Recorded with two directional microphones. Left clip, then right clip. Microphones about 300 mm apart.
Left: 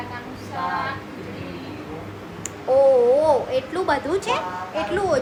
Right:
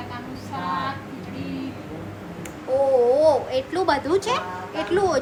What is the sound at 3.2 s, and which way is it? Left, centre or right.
A woman's voice, centre.